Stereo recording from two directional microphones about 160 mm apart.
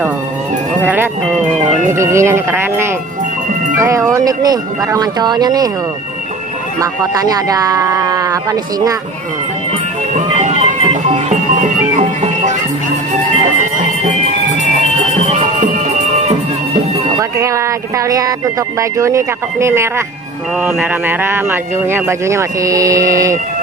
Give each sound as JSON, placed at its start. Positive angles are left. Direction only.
{"t": 1.9, "sound": "speech", "side_deg": -15}
{"t": 6.8, "sound": "speech", "side_deg": -20}
{"t": 10.1, "sound": "music", "side_deg": -45}
{"t": 14.0, "sound": "music", "side_deg": -50}
{"t": 17.2, "sound": "speech", "side_deg": -20}